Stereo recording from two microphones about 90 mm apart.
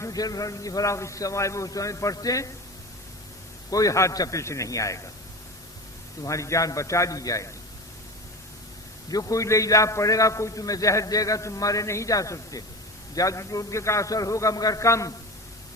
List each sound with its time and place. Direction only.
0.0 s a man's voice: 45° left (ahead or behind)
3.7 s a man's voice: 40° left (ahead or behind)
6.2 s a man's voice: 35° left (ahead or behind)
9.0 s a man's voice: 40° left (ahead or behind)